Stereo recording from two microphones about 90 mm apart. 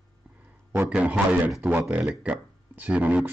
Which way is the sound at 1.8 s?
15° right (ahead or behind).